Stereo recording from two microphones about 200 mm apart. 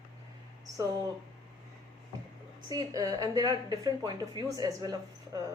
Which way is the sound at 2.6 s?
20° right (ahead or behind).